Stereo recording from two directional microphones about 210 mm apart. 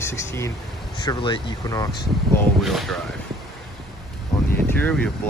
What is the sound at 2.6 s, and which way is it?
Speech, centre (ahead or behind).